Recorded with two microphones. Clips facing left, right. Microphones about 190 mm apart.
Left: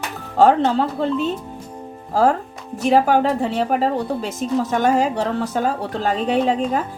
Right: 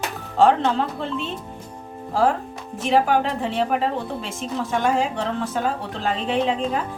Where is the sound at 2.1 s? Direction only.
40° left (ahead or behind).